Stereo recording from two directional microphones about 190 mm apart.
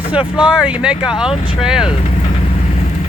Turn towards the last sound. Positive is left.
turn(degrees=-5)  # may be behind; listen again after turning